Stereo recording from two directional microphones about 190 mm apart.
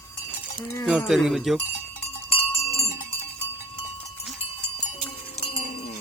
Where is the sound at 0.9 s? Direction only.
Centre (ahead or behind).